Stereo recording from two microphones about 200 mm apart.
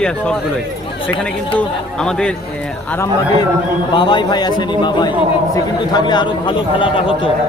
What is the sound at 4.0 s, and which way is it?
A man's voice, 20° left (ahead or behind).